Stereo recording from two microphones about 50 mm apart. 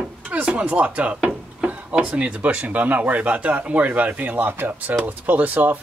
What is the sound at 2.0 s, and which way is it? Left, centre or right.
Speech, right.